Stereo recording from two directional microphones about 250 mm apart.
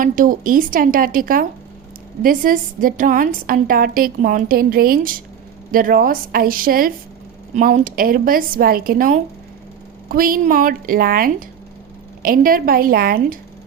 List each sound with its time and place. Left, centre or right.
0.0 s a woman's voice: right